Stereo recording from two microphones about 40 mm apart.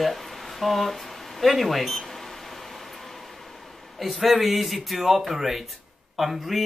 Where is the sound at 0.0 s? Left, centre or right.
Centre.